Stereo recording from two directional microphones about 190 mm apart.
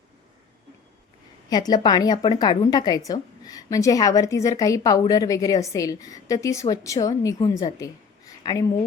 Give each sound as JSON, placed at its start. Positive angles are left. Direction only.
{"t": 1.5, "sound": "a woman's voice", "side_deg": 20}